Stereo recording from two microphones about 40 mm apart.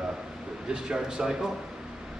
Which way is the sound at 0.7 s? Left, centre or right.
Centre.